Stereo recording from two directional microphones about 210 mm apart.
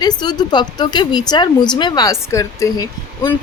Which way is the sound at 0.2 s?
20° left (ahead or behind).